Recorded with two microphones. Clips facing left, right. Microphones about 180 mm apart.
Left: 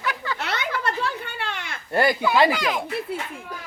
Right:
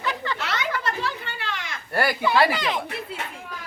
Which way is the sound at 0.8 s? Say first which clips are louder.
Left 2 dB; 55° left (ahead or behind).